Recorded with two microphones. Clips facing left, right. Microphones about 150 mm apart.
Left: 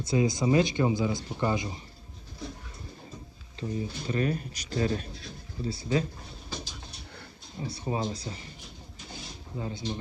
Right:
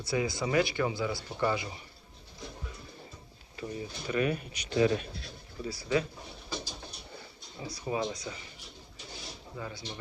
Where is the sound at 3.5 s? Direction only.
30° left (ahead or behind).